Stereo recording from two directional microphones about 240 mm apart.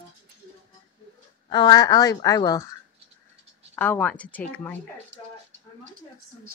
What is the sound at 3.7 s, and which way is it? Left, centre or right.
A woman's voice, centre.